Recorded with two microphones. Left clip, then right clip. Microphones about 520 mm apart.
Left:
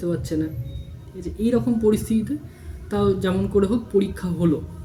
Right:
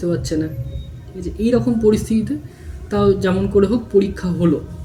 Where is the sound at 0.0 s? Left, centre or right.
Left.